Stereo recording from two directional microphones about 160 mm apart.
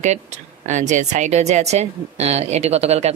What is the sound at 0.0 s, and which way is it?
A woman's voice, 45° right (ahead or behind).